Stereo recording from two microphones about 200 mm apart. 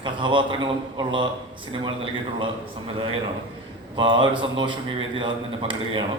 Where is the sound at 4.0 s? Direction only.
25° right (ahead or behind).